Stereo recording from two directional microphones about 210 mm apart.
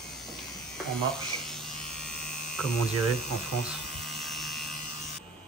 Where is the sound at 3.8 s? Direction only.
Centre (ahead or behind).